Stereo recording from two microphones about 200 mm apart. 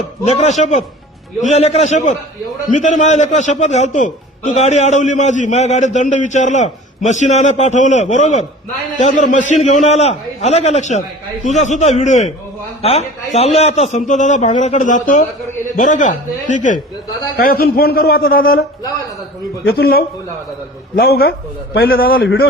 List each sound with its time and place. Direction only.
0.3 s a man's voice: 35° left (ahead or behind)
19.6 s a man's voice: 50° left (ahead or behind)